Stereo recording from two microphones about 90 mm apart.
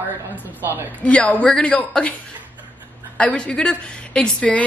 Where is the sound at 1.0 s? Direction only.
15° left (ahead or behind).